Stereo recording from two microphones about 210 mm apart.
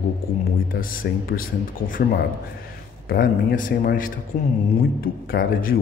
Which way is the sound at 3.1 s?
45° left (ahead or behind).